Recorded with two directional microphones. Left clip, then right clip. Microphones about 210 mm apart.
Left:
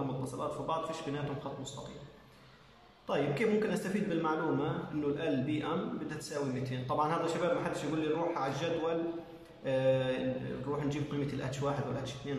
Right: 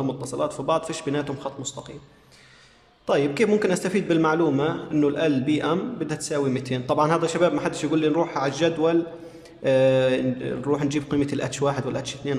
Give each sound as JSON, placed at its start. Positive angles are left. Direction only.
{"t": 0.2, "sound": "a man's voice", "side_deg": -55}
{"t": 3.1, "sound": "a man's voice", "side_deg": -55}